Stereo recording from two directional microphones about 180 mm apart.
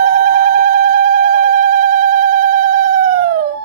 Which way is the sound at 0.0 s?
45° right (ahead or behind).